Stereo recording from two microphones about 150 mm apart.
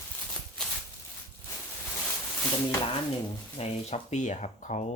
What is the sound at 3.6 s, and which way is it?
Speech, 45° left (ahead or behind).